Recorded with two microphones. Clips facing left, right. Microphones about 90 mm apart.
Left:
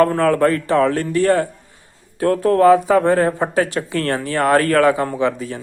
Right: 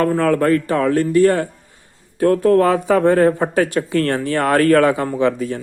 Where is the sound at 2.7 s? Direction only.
20° left (ahead or behind).